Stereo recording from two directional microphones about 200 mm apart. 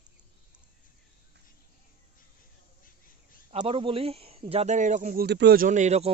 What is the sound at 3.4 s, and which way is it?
Speech, 30° right (ahead or behind).